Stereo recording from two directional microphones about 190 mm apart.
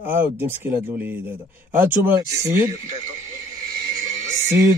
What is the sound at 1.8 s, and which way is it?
Speech, 10° right (ahead or behind).